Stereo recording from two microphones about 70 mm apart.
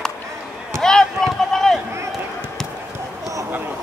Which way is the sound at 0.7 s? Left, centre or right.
Centre.